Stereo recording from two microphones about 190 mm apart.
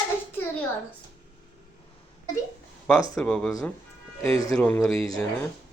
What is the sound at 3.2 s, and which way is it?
Speech, 5° left (ahead or behind).